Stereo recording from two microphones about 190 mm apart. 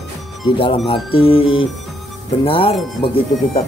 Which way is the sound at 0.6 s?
25° left (ahead or behind).